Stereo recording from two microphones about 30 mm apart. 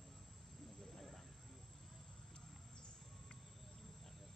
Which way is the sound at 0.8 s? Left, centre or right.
Centre.